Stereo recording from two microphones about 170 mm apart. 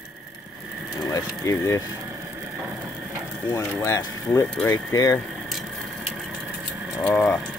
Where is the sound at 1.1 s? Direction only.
20° left (ahead or behind).